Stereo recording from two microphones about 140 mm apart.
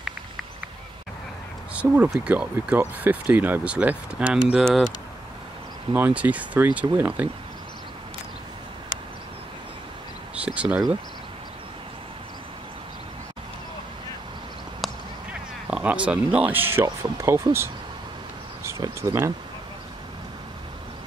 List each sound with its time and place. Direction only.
1.7 s speech: 10° right (ahead or behind)
5.9 s speech: 10° right (ahead or behind)
10.4 s speech: 10° right (ahead or behind)
15.7 s speech: 10° right (ahead or behind)